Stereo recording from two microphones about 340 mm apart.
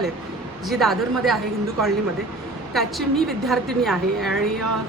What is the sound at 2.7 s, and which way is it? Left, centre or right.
A woman's voice, centre.